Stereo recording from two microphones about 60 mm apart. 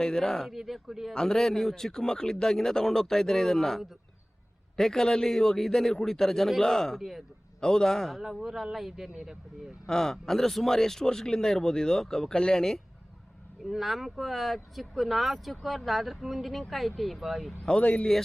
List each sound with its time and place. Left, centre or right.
0.0 s speech: centre
0.5 s speech: centre
1.1 s speech: centre
7.6 s speech: centre
8.2 s speech: centre
9.8 s speech: centre
13.7 s speech: centre
17.7 s a man's voice: centre